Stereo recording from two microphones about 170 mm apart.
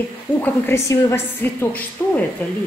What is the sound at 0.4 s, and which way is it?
A woman's voice, 15° left (ahead or behind).